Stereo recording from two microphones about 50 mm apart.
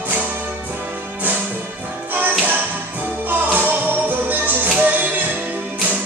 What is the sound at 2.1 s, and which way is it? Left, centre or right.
Music, right.